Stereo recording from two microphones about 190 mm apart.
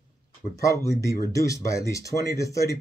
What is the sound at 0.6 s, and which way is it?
Speech, 15° left (ahead or behind).